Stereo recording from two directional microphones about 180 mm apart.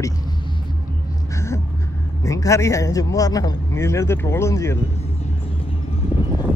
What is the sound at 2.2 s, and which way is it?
A man's voice, 15° left (ahead or behind).